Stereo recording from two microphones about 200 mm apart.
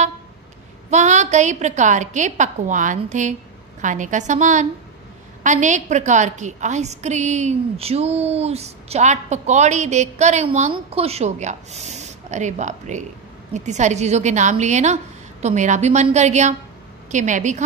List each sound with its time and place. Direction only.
0.8 s a woman's voice: 35° right (ahead or behind)